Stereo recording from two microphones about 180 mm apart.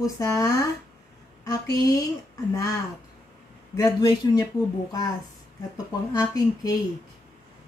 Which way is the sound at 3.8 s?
20° left (ahead or behind).